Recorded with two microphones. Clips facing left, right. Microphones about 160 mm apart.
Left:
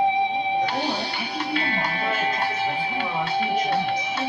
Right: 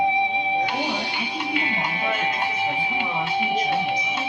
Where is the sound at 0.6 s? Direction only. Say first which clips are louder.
Even; 15° right (ahead or behind).